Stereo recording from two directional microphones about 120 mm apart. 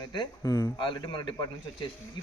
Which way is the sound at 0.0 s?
40° left (ahead or behind).